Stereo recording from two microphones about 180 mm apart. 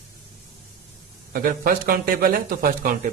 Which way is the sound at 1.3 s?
55° right (ahead or behind).